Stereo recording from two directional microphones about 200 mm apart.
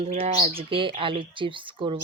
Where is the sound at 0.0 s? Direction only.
30° right (ahead or behind).